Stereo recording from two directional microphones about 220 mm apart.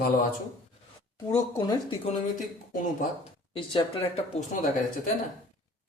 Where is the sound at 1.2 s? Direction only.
15° left (ahead or behind).